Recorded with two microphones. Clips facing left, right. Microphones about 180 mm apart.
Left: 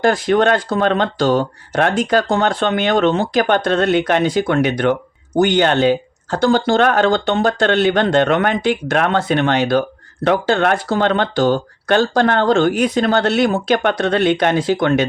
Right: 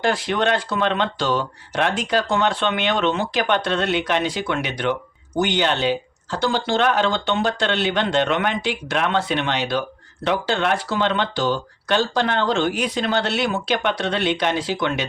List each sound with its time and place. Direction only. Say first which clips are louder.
0.0 s speech: left 7 dB; 45° left (ahead or behind)